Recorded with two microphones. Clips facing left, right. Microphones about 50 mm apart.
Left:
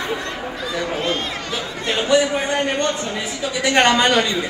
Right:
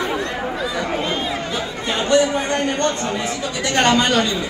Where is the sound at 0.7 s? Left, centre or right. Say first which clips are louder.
Left 4 dB; centre.